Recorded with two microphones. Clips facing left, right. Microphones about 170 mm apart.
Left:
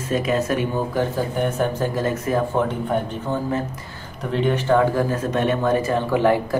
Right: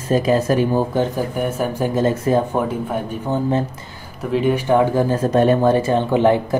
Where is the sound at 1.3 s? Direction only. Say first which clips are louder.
Even; 10° right (ahead or behind); by 2.4 s 30° right (ahead or behind).